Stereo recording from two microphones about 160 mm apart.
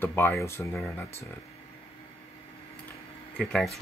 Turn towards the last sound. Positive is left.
turn(degrees=5)  # may be behind; listen again after turning